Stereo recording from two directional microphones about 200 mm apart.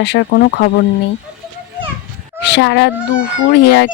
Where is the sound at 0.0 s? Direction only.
55° left (ahead or behind).